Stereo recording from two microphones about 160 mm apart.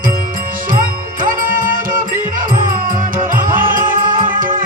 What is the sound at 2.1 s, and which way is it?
Music, 60° right (ahead or behind).